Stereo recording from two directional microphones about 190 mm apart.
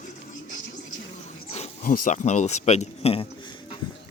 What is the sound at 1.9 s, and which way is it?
Speech, 40° left (ahead or behind).